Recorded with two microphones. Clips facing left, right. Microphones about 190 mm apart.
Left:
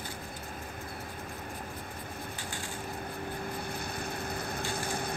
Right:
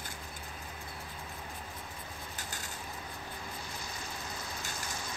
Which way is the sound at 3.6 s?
60° left (ahead or behind).